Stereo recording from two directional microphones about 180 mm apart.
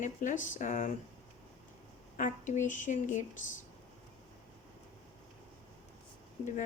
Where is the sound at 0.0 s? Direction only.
45° left (ahead or behind).